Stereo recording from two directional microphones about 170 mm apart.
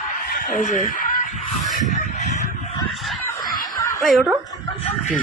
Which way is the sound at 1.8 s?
45° left (ahead or behind).